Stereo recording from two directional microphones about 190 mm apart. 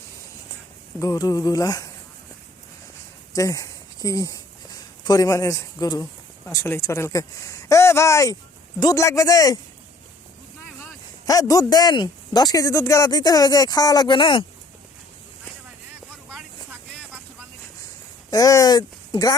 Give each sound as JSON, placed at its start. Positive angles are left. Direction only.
{"t": 0.9, "sound": "speech", "side_deg": 15}
{"t": 3.3, "sound": "a man's voice", "side_deg": 15}
{"t": 11.3, "sound": "speech", "side_deg": 20}
{"t": 18.3, "sound": "speech", "side_deg": 20}